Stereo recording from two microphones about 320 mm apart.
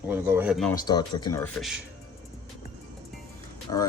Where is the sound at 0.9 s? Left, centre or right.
Centre.